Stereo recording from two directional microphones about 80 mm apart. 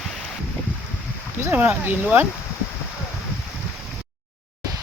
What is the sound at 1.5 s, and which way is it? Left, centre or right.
Speech, right.